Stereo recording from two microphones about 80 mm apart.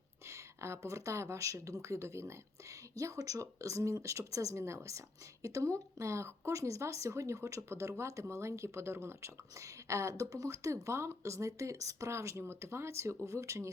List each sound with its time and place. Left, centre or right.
0.3 s a woman's voice: right